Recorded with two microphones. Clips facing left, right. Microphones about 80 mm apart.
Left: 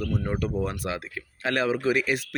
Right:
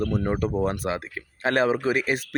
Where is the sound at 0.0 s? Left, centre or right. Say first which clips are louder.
Right 4 dB; right.